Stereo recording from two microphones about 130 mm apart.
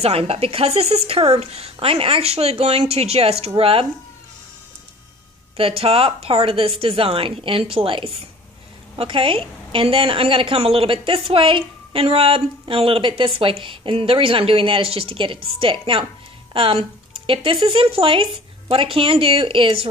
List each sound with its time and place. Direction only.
0.0 s a woman's voice: 50° right (ahead or behind)
5.6 s a woman's voice: 45° right (ahead or behind)